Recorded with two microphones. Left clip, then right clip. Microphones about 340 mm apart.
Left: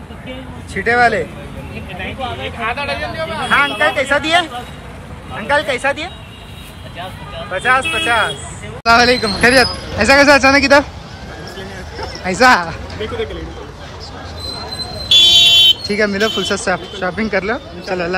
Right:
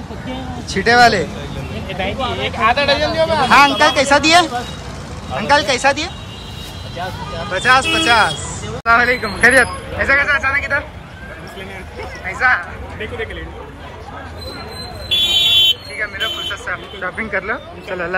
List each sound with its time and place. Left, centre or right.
0.7 s speech: centre
2.0 s speech: right
3.4 s speech: centre
5.5 s speech: centre
7.5 s speech: centre
8.8 s speech: centre
12.3 s speech: centre
15.3 s fire alarm: left
16.0 s speech: centre